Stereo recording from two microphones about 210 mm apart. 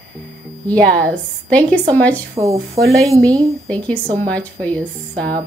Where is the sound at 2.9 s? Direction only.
15° right (ahead or behind).